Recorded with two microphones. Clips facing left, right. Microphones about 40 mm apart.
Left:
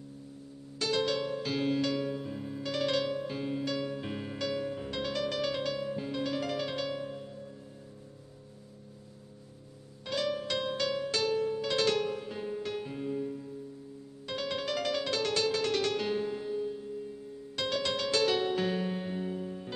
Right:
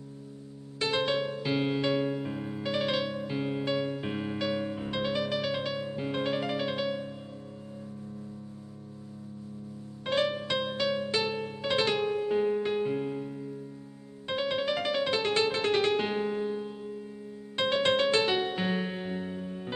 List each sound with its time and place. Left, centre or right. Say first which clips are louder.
0.7 s music: right 2 dB; right
6.4 s music: right 3 dB; centre
10.0 s music: right 5 dB; right
10.3 s music: right 2 dB; right